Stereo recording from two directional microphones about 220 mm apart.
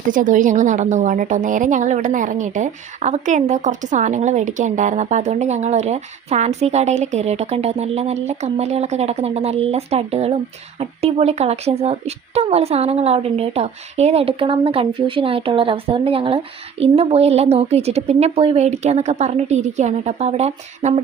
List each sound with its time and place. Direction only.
0.1 s a woman's voice: 35° right (ahead or behind)